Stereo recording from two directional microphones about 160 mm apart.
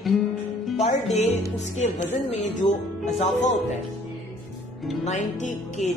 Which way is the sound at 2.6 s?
50° left (ahead or behind).